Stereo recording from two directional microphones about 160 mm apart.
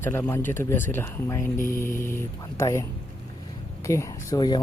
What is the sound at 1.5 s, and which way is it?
Music, 55° left (ahead or behind).